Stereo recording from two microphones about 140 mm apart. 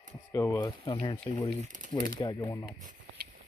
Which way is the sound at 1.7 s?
70° right (ahead or behind).